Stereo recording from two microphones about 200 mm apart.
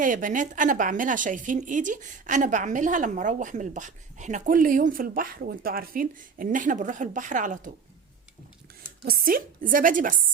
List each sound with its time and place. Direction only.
0.0 s a woman's voice: 40° right (ahead or behind)
9.0 s a woman's voice: 45° right (ahead or behind)